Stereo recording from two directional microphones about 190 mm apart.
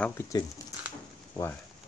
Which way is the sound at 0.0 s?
15° left (ahead or behind).